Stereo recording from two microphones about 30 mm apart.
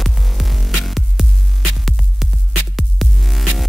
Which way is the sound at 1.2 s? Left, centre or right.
Centre.